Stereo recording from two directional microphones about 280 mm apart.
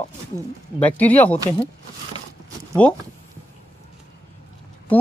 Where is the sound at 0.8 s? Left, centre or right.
Centre.